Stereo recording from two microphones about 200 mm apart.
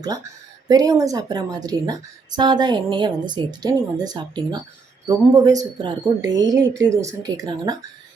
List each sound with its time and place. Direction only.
0.7 s a woman's voice: 20° right (ahead or behind)